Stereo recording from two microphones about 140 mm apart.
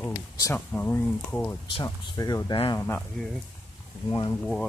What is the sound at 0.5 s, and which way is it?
Speech, 15° left (ahead or behind).